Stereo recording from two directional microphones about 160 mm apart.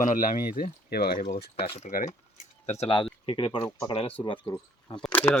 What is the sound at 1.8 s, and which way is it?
Speech, 55° left (ahead or behind).